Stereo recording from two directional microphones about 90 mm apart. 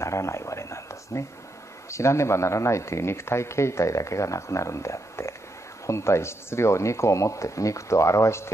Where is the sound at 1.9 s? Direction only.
30° left (ahead or behind).